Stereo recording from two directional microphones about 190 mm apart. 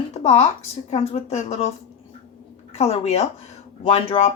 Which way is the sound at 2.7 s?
35° left (ahead or behind).